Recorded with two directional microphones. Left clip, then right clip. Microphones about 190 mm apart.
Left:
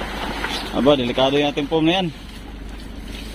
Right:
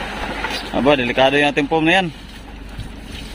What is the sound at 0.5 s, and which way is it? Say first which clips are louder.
Speech: right 1 dB; 30° right (ahead or behind).